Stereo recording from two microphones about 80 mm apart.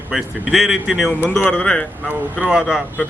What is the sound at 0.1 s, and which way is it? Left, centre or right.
Speech, centre.